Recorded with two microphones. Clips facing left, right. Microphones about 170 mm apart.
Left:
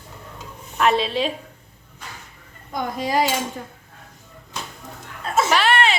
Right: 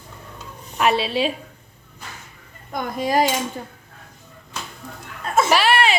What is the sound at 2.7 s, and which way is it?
Dishes, 50° right (ahead or behind).